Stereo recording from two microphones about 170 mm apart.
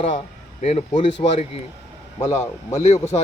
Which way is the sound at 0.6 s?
40° left (ahead or behind).